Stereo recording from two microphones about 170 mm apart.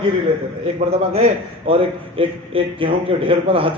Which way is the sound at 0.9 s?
35° right (ahead or behind).